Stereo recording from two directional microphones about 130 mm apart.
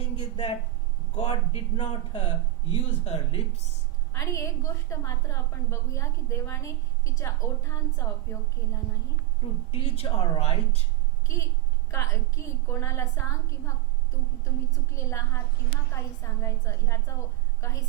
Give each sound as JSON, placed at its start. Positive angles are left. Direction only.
{"t": 0.2, "sound": "a man's voice", "side_deg": 45}
{"t": 4.1, "sound": "a woman's voice", "side_deg": 25}
{"t": 9.4, "sound": "a man's voice", "side_deg": 50}
{"t": 11.9, "sound": "a woman's voice", "side_deg": 20}